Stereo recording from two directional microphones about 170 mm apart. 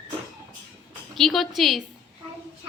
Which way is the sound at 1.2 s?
Centre (ahead or behind).